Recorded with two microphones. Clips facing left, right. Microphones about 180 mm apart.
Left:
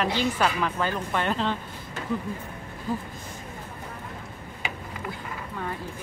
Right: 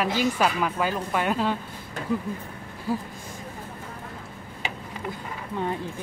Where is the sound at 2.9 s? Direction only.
10° right (ahead or behind).